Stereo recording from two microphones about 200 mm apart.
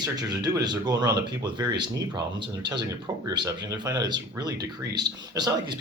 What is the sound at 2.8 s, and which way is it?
Speech, 20° right (ahead or behind).